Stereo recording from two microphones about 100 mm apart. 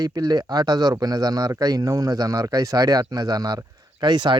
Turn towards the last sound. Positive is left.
turn(degrees=-45)  # may be behind; listen again after turning